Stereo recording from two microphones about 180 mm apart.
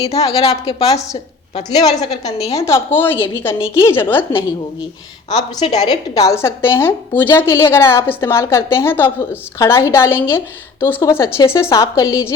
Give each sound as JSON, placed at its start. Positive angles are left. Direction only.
{"t": 0.0, "sound": "a woman's voice", "side_deg": 20}
{"t": 5.3, "sound": "a woman's voice", "side_deg": 20}